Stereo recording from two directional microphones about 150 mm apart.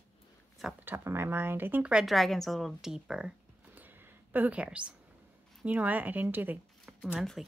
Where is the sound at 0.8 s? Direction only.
15° right (ahead or behind).